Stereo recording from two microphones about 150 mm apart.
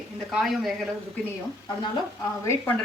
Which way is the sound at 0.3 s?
Centre (ahead or behind).